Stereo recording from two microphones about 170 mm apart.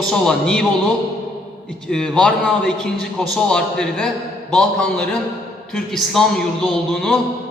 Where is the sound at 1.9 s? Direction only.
5° left (ahead or behind).